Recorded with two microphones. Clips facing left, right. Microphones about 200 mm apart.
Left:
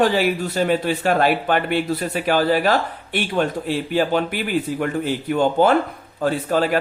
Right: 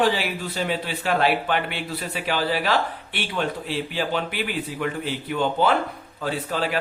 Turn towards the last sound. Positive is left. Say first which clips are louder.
# left 6 dB
turn(degrees=45)  # may be behind; listen again after turning